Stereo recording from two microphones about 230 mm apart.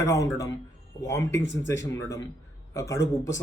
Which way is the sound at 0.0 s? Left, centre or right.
Centre.